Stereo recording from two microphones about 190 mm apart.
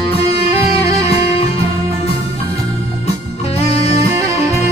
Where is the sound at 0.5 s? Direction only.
30° left (ahead or behind).